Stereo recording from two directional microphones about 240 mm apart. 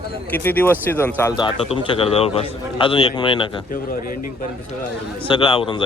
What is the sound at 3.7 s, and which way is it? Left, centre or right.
Speech, left.